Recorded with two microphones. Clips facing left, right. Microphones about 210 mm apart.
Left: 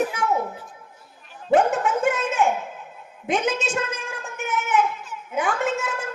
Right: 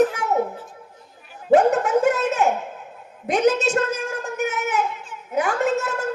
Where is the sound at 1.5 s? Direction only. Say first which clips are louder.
Right 3 dB; 40° right (ahead or behind).